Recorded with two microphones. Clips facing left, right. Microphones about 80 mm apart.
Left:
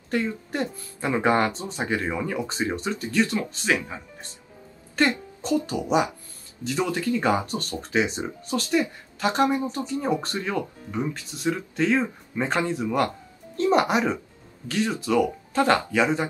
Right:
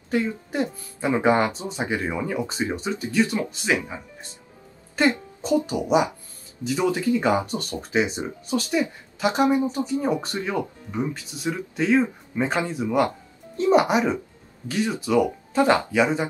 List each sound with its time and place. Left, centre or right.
0.1 s speech: centre
5.5 s speech: centre